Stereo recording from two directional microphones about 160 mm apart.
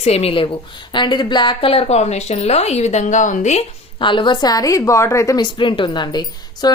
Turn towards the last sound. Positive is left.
turn(degrees=25)  # may be behind; listen again after turning